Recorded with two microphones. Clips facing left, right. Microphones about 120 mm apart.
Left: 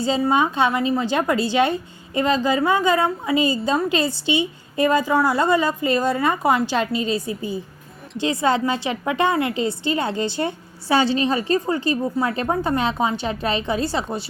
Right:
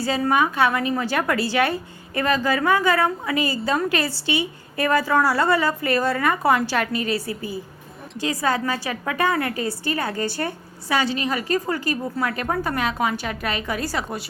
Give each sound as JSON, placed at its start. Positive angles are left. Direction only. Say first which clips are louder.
{"t": 0.2, "sound": "a woman's voice", "louder": "right 1 dB", "side_deg": 20}